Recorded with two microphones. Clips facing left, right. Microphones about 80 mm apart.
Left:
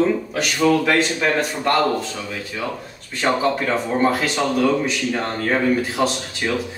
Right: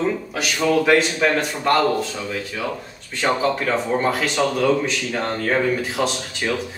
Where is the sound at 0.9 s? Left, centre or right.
Centre.